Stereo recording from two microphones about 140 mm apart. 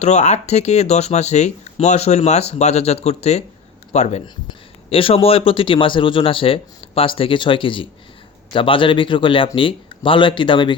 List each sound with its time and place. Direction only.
0.0 s speech: 55° left (ahead or behind)
4.4 s a man's voice: 40° left (ahead or behind)